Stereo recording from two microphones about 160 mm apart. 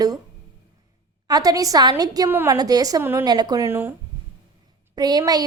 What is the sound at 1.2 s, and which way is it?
A woman's voice, 25° right (ahead or behind).